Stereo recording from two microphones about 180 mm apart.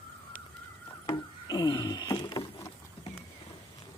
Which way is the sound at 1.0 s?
25° left (ahead or behind).